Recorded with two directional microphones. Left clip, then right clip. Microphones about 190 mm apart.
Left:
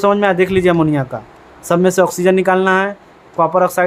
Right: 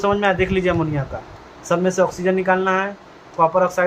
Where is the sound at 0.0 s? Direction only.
60° left (ahead or behind).